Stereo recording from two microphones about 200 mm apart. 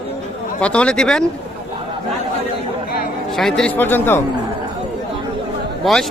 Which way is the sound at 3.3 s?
Centre (ahead or behind).